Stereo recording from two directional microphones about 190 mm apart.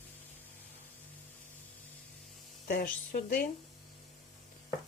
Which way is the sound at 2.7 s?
50° left (ahead or behind).